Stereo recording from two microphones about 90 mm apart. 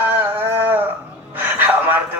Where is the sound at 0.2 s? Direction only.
20° right (ahead or behind).